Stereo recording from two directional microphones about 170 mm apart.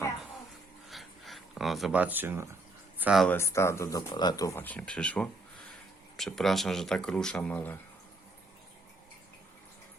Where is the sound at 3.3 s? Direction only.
15° left (ahead or behind).